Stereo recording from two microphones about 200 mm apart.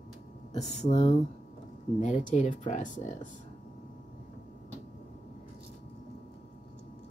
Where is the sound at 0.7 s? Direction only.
35° left (ahead or behind).